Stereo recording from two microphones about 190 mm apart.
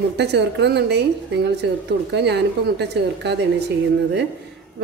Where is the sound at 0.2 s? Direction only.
65° right (ahead or behind).